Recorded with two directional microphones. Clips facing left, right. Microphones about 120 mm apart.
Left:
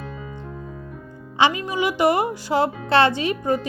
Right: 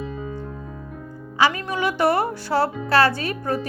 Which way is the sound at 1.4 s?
20° left (ahead or behind).